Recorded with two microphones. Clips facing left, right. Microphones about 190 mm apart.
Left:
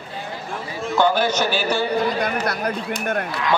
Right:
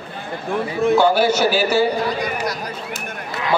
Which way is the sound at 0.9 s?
10° right (ahead or behind).